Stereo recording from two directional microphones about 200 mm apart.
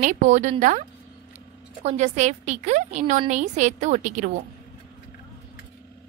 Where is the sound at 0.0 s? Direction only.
35° right (ahead or behind).